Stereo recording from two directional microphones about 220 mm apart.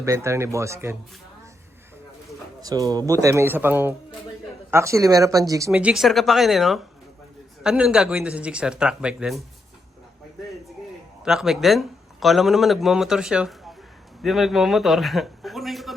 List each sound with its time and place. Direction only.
0.0 s speech: 15° right (ahead or behind)
2.6 s speech: 15° right (ahead or behind)
11.2 s a man's voice: centre (ahead or behind)